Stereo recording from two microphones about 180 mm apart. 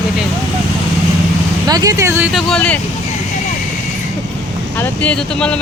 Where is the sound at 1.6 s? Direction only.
20° right (ahead or behind).